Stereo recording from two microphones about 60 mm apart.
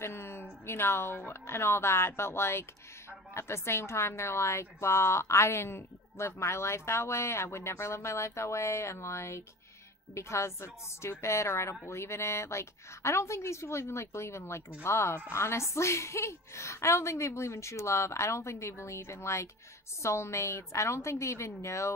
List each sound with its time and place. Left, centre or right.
0.0 s a woman's voice: left